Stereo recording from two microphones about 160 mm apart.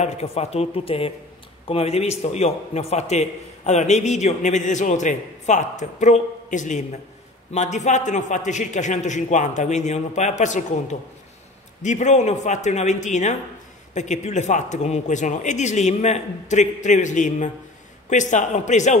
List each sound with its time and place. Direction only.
0.0 s a man's voice: 40° left (ahead or behind)